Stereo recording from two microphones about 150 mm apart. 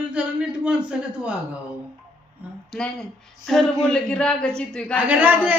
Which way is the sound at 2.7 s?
5° left (ahead or behind).